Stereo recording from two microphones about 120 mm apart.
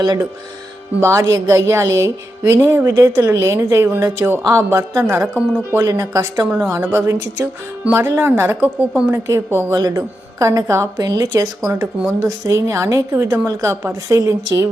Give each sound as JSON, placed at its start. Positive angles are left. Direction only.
{"t": 1.0, "sound": "speech", "side_deg": -25}